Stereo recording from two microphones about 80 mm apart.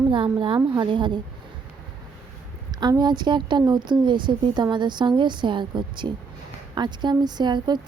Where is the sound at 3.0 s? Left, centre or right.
Right.